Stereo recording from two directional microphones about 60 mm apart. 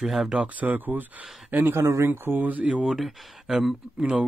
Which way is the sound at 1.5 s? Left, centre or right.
Right.